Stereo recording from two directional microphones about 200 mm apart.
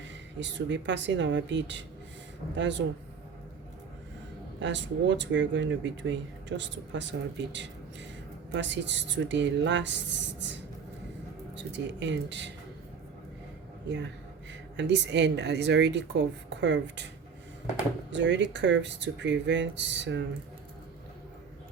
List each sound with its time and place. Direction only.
0.3 s speech: 65° right (ahead or behind)
4.6 s speech: 65° right (ahead or behind)
11.5 s speech: 65° right (ahead or behind)
13.8 s speech: 60° right (ahead or behind)
18.1 s speech: 65° right (ahead or behind)